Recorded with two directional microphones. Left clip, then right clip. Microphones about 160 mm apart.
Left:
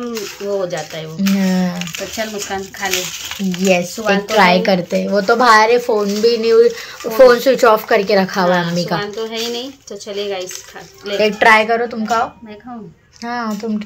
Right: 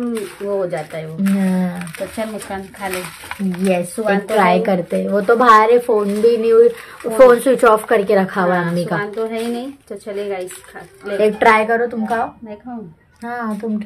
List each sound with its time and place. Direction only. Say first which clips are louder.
0.1 s speech: even; 5° right (ahead or behind)
2.1 s speech: left 5 dB; 15° right (ahead or behind)
3.6 s speech: left 3 dB; 5° right (ahead or behind)